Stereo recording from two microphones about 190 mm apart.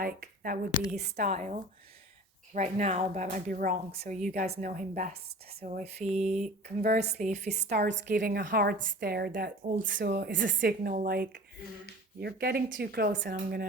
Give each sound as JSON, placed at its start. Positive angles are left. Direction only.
{"t": 0.0, "sound": "a woman's voice", "side_deg": -50}
{"t": 1.3, "sound": "speech", "side_deg": -35}
{"t": 6.8, "sound": "a woman's voice", "side_deg": -55}
{"t": 7.1, "sound": "speech", "side_deg": -35}
{"t": 7.8, "sound": "a woman's voice", "side_deg": -70}
{"t": 8.0, "sound": "a woman's voice", "side_deg": -45}
{"t": 10.6, "sound": "a woman's voice", "side_deg": -50}